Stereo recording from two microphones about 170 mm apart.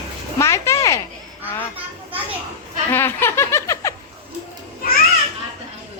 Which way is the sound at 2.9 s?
15° left (ahead or behind).